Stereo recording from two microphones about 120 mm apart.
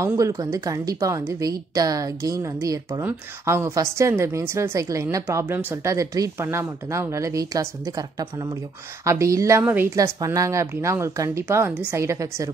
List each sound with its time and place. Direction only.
0.0 s a woman's voice: 25° right (ahead or behind)
3.0 s a woman's voice: 20° right (ahead or behind)
9.6 s a woman's voice: 15° right (ahead or behind)
9.9 s a woman's voice: 30° right (ahead or behind)